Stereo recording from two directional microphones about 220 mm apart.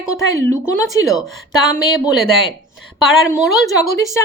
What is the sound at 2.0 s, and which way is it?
Speech, centre (ahead or behind).